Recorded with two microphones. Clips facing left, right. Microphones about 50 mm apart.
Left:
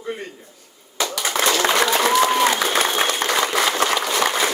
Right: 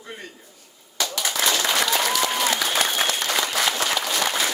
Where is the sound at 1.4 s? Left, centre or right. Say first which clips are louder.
Left 5 dB; left.